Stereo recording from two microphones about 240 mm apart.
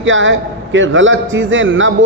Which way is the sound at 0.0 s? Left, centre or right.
Right.